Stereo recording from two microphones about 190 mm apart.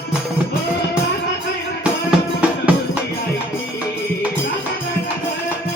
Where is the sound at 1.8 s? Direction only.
5° right (ahead or behind).